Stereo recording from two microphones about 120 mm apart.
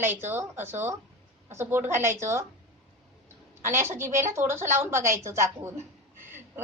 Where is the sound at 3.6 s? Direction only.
20° right (ahead or behind).